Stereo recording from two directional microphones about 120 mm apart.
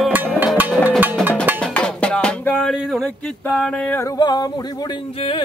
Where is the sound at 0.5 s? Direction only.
15° right (ahead or behind).